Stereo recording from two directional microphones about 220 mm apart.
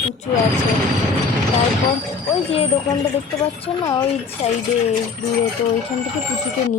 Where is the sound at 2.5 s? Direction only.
25° left (ahead or behind).